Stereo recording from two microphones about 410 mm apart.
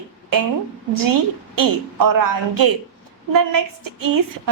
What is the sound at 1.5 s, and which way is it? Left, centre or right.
A woman's voice, right.